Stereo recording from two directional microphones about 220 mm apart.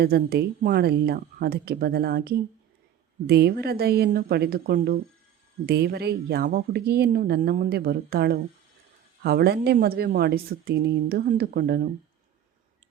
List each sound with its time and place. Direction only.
0.0 s speech: 45° right (ahead or behind)